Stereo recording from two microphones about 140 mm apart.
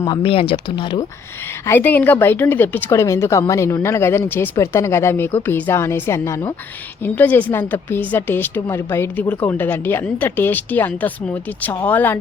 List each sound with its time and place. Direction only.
0.2 s speech: 40° left (ahead or behind)
1.6 s a woman's voice: 15° left (ahead or behind)